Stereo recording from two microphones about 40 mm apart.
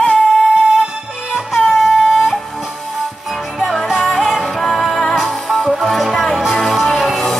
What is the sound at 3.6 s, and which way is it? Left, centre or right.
Music, centre.